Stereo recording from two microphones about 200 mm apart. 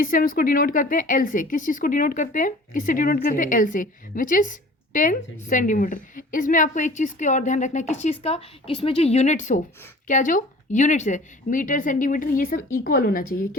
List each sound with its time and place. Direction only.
0.0 s a woman's voice: 45° left (ahead or behind)